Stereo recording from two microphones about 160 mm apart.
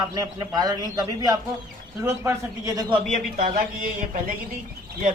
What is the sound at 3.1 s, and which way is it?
A man's voice, 55° right (ahead or behind).